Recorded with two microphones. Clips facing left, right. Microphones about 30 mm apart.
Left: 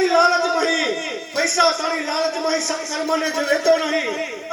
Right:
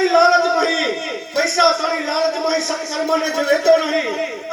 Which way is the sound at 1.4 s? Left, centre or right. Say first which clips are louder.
Right 3 dB; centre.